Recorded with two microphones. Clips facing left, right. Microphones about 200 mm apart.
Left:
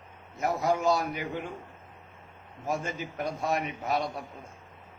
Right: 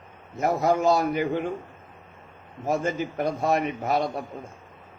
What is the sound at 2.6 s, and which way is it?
A man's voice, 45° right (ahead or behind).